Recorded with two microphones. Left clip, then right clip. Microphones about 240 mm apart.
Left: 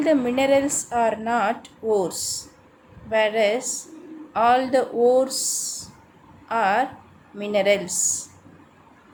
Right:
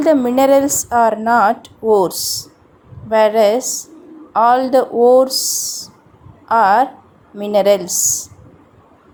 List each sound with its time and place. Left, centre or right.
0.0 s a woman's voice: right
6.5 s a woman's voice: right